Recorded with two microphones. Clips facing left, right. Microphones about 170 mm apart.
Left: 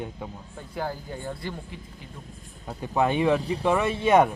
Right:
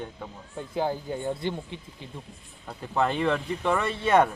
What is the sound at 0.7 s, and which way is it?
Speech, 20° right (ahead or behind).